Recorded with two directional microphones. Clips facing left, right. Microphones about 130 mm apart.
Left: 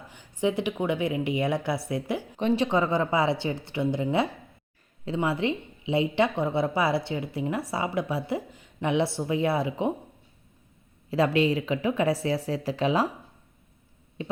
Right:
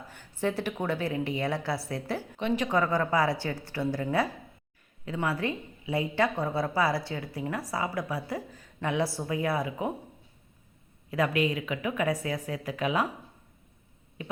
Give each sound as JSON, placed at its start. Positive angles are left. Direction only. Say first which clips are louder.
{"t": 0.1, "sound": "a woman's voice", "louder": "left 4 dB", "side_deg": 15}
{"t": 11.1, "sound": "a woman's voice", "louder": "left 4 dB", "side_deg": 30}
{"t": 14.2, "sound": "speech", "louder": "left 4 dB", "side_deg": 30}